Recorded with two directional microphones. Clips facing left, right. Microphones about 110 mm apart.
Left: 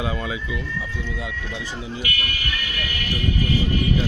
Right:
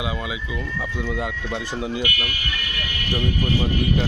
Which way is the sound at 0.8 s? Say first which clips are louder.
Right 4 dB; 65° right (ahead or behind).